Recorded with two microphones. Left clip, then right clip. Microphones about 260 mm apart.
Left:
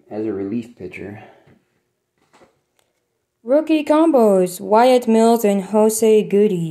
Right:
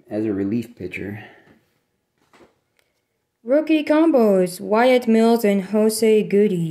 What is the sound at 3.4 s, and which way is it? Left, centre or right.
Speech, centre.